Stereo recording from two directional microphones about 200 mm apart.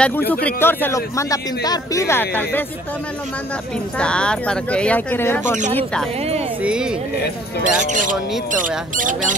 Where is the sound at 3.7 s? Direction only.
5° left (ahead or behind).